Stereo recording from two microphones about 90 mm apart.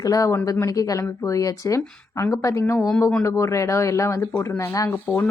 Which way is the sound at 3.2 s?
35° left (ahead or behind).